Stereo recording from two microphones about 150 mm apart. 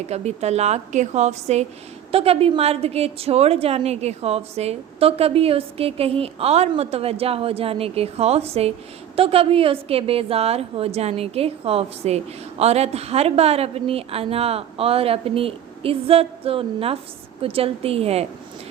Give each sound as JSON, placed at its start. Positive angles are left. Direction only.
{"t": 0.1, "sound": "a woman's voice", "side_deg": -45}